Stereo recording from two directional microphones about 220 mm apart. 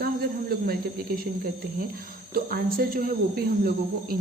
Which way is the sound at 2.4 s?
40° right (ahead or behind).